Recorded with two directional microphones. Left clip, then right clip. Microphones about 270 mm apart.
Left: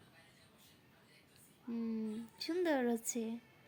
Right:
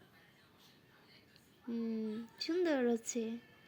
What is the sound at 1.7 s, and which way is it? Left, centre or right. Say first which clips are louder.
Speech: right 2 dB; centre.